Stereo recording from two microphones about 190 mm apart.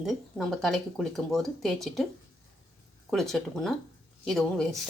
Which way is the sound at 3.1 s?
Centre (ahead or behind).